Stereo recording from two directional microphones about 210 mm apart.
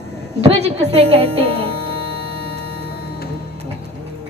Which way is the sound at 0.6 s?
30° right (ahead or behind).